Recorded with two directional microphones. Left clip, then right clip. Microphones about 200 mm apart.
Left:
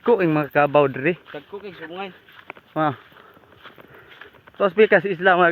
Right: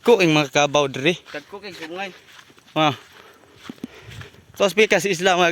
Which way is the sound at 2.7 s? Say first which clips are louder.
Right 3 dB; 20° right (ahead or behind).